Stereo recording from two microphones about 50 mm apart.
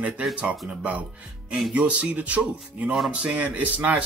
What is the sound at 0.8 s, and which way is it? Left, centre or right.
Speech, right.